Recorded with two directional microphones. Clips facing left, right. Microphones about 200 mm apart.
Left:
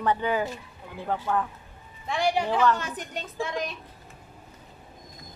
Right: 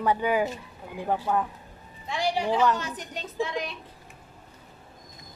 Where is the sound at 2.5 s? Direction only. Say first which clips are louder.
Right 2 dB; 15° right (ahead or behind).